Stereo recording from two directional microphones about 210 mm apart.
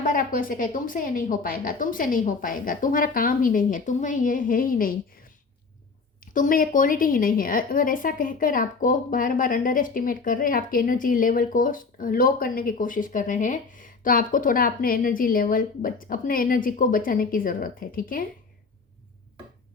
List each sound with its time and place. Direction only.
0.0 s a woman's voice: 40° left (ahead or behind)
6.3 s a woman's voice: 40° left (ahead or behind)